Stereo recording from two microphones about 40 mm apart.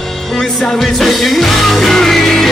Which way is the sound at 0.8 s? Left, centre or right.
Centre.